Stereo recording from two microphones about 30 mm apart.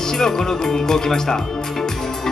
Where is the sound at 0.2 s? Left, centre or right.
Centre.